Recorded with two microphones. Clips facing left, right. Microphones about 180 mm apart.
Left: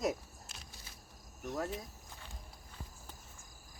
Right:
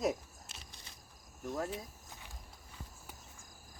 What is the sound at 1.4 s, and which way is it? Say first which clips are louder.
Speech: even; 5° right (ahead or behind).